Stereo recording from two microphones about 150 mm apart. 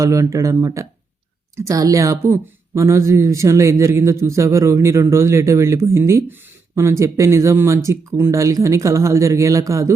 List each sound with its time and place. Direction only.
0.0 s a woman's voice: 20° right (ahead or behind)